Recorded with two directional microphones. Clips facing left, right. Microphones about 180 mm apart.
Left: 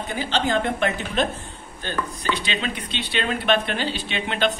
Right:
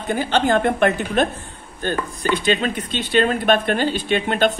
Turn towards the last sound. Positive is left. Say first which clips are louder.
# right 6 dB
turn(degrees=-50)  # may be behind; listen again after turning